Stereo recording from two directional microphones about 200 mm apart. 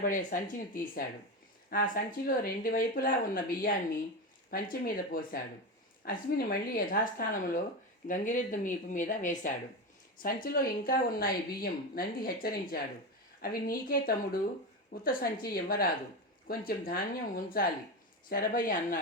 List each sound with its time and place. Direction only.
0.0 s speech: 40° left (ahead or behind)